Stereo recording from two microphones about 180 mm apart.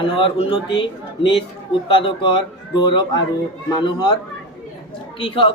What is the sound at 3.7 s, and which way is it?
Speech, 25° left (ahead or behind).